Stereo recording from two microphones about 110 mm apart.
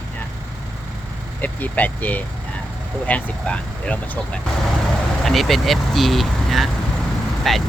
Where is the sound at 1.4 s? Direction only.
15° left (ahead or behind).